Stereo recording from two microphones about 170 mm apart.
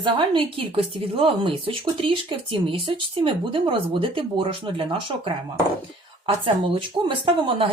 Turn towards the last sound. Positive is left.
turn(degrees=-30)  # may be behind; listen again after turning